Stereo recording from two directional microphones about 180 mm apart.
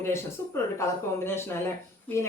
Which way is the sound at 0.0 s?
15° left (ahead or behind).